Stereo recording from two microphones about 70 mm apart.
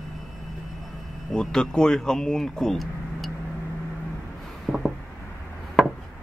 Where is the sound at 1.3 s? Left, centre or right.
Centre.